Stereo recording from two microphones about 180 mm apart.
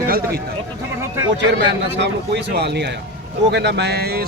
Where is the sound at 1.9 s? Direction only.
70° right (ahead or behind).